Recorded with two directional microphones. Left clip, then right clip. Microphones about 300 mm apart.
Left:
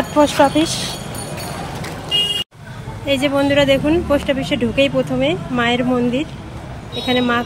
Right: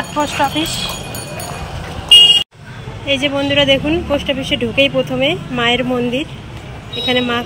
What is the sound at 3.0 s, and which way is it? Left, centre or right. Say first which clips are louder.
Speech: even; centre.